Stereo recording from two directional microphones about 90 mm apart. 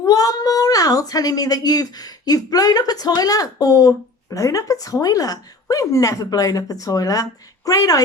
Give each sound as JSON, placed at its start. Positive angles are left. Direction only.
{"t": 0.0, "sound": "speech", "side_deg": 45}